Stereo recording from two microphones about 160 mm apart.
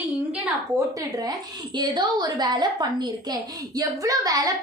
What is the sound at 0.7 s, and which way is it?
A woman's voice, 20° right (ahead or behind).